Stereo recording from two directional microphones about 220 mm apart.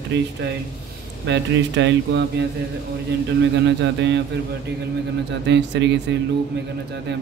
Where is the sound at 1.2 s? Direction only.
55° right (ahead or behind).